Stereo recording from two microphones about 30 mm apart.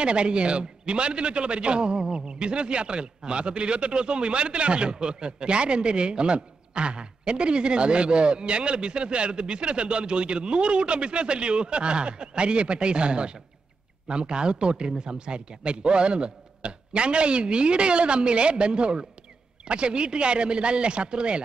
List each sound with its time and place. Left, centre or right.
0.0 s a man's voice: right